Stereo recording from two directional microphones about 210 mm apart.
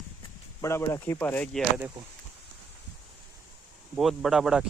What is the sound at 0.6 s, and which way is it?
Speech, 15° left (ahead or behind).